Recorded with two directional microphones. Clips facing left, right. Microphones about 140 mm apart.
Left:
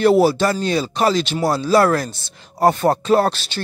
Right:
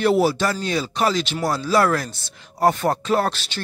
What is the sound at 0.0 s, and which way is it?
Speech, 35° left (ahead or behind).